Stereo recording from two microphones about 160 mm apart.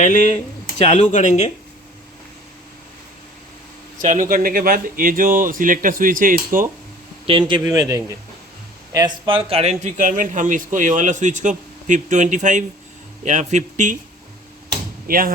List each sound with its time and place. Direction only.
0.0 s speech: 55° left (ahead or behind)
3.9 s speech: 55° right (ahead or behind)
7.3 s a man's voice: 30° right (ahead or behind); by 13.9 s 50° right (ahead or behind)
15.0 s speech: 65° right (ahead or behind)